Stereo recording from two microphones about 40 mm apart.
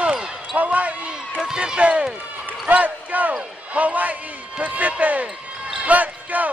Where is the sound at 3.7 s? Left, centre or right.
Right.